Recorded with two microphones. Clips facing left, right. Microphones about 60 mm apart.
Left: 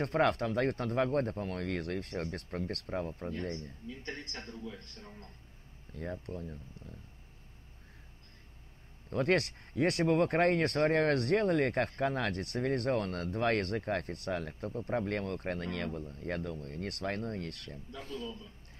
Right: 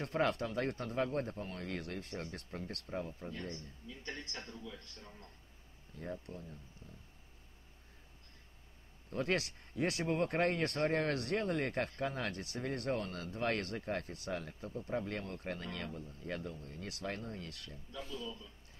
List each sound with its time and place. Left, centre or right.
0.0 s speech: left
6.2 s speech: left
9.1 s speech: left